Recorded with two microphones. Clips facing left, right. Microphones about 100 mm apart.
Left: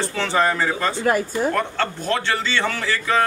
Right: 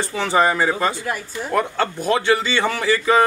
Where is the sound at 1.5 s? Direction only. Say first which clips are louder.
Right 2 dB; 10° right (ahead or behind).